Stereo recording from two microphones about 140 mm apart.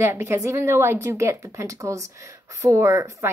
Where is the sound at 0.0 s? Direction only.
15° right (ahead or behind).